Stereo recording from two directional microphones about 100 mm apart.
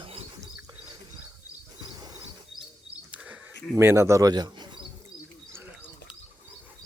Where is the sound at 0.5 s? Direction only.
35° right (ahead or behind).